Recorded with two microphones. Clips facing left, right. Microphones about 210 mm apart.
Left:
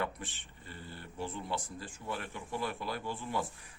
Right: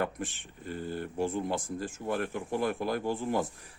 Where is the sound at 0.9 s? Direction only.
45° right (ahead or behind).